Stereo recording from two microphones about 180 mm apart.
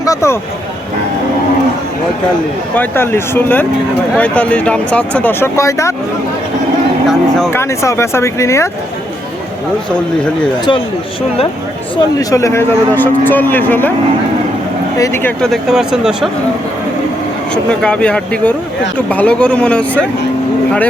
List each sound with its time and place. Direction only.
0.0 s speech: 15° left (ahead or behind)
2.7 s speech: 10° left (ahead or behind)
7.1 s speech: centre (ahead or behind)
7.5 s speech: 15° left (ahead or behind)
12.3 s speech: 15° left (ahead or behind)
14.9 s speech: 15° left (ahead or behind)
15.4 s speech: centre (ahead or behind)
17.5 s speech: 5° left (ahead or behind)